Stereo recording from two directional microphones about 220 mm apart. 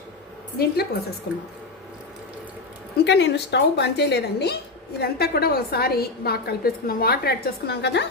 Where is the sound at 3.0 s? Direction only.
50° left (ahead or behind).